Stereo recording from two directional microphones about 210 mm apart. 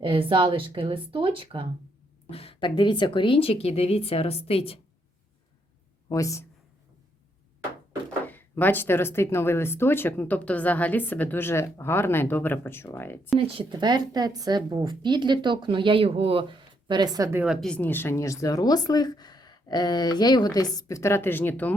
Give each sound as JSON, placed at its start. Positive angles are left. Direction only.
{"t": 0.0, "sound": "a woman's voice", "side_deg": -25}
{"t": 2.3, "sound": "speech", "side_deg": 25}
{"t": 6.1, "sound": "speech", "side_deg": 15}
{"t": 8.3, "sound": "speech", "side_deg": 10}
{"t": 13.6, "sound": "a woman's voice", "side_deg": -25}
{"t": 17.4, "sound": "speech", "side_deg": 0}